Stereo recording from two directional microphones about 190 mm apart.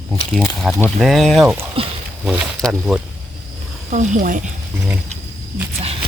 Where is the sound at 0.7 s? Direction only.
10° left (ahead or behind).